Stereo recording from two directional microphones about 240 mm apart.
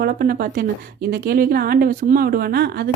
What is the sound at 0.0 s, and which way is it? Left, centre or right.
A woman's voice, right.